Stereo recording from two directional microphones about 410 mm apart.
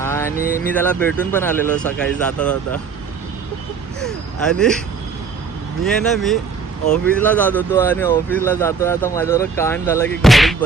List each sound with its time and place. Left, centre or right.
0.0 s a sound: centre
0.6 s speech: centre
4.0 s speech: centre
5.8 s speech: centre